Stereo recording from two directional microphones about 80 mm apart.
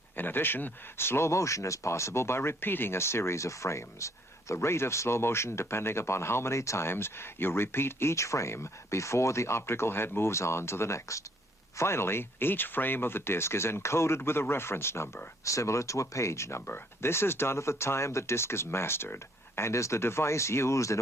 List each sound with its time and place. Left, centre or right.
0.2 s speech: left